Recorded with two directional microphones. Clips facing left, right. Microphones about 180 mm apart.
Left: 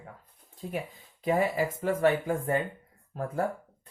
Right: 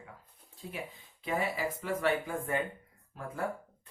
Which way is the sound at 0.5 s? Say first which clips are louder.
Left 8 dB; 45° left (ahead or behind).